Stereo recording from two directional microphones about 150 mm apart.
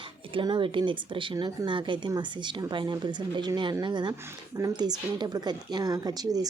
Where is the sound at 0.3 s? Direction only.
35° right (ahead or behind).